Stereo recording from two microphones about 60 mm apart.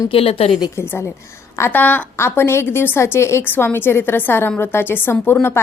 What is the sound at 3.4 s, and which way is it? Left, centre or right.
A woman's voice, left.